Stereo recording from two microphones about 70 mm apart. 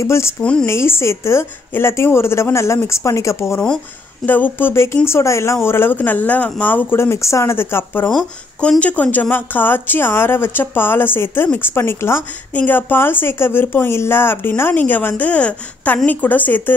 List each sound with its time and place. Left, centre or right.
0.0 s a woman's voice: left
0.4 s speech: centre
0.7 s a woman's voice: left
4.3 s a woman's voice: left
8.5 s a woman's voice: centre